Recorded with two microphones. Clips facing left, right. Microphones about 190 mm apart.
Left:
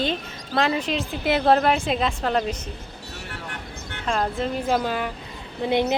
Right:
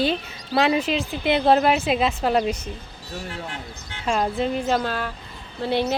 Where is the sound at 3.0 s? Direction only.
65° left (ahead or behind).